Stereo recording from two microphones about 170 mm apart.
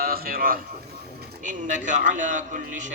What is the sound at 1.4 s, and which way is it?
Speech, 45° right (ahead or behind).